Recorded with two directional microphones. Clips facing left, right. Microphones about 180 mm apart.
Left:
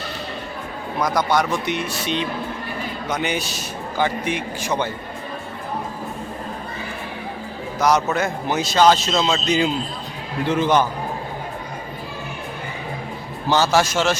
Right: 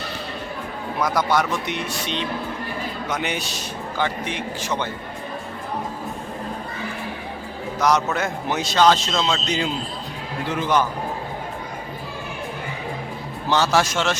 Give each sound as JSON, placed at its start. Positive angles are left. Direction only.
{"t": 1.0, "sound": "a man's voice", "side_deg": -5}
{"t": 7.8, "sound": "a man's voice", "side_deg": 0}
{"t": 10.5, "sound": "a man's voice", "side_deg": 25}
{"t": 13.5, "sound": "a man's voice", "side_deg": 0}